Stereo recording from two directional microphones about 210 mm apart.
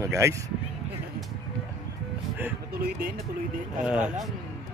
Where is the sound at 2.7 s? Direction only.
45° right (ahead or behind).